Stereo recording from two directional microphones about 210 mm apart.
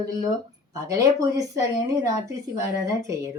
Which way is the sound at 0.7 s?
15° right (ahead or behind).